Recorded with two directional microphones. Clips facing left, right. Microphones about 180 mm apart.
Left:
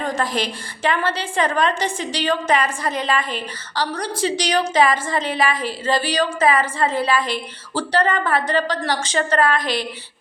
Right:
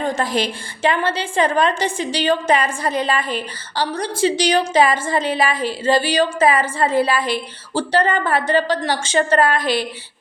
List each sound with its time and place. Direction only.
0.0 s a woman's voice: 30° right (ahead or behind)